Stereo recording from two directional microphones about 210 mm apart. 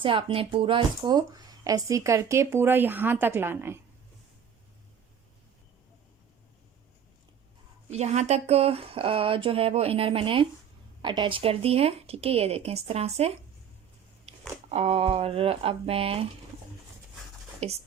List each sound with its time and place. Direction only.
0.0 s speech: 25° right (ahead or behind)
7.9 s speech: 30° right (ahead or behind)
14.7 s speech: 30° right (ahead or behind)
17.6 s speech: 30° right (ahead or behind)